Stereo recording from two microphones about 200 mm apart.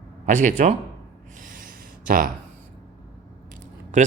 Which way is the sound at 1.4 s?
45° right (ahead or behind).